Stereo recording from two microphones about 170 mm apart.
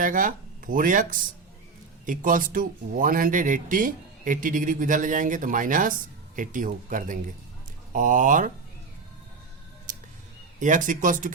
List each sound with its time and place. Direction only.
0.0 s speech: 50° right (ahead or behind)
9.9 s music: 50° right (ahead or behind)
10.6 s speech: 50° right (ahead or behind)